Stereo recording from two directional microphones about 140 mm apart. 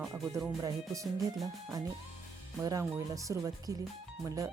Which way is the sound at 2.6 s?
25° right (ahead or behind).